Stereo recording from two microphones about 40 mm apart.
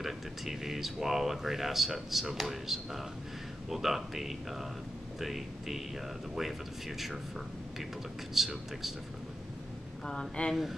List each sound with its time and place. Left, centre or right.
0.0 s speech: centre
8.4 s speech: centre
10.0 s speech: left